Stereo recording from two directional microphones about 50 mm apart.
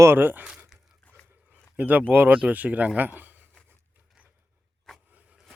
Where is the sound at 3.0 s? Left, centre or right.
Right.